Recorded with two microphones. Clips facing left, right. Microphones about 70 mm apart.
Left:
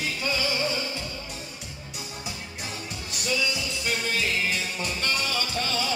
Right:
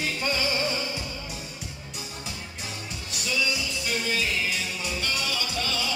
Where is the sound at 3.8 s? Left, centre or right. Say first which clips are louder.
Left 1 dB; left.